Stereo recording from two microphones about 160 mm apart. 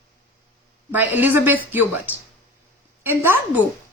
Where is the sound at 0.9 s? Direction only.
10° right (ahead or behind).